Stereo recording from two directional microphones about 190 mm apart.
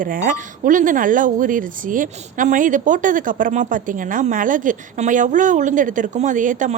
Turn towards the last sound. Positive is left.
turn(degrees=-40)  # may be behind; listen again after turning